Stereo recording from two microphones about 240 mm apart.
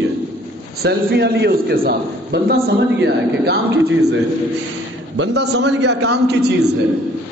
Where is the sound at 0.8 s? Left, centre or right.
Right.